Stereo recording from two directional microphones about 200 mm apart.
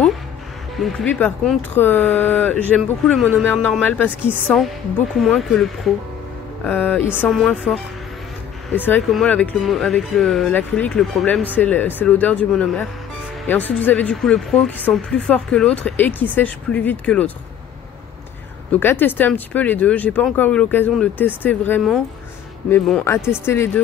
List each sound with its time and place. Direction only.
0.7 s speech: 5° left (ahead or behind)
7.1 s speech: 5° right (ahead or behind)
18.7 s speech: 10° left (ahead or behind)